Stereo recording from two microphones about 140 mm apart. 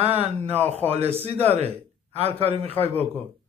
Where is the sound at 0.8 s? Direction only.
45° right (ahead or behind).